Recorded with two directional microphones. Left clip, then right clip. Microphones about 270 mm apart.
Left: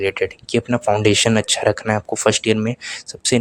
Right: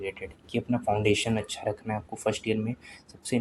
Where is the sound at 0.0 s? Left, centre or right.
Left.